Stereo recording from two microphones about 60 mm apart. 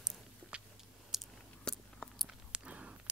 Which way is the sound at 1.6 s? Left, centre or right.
Centre.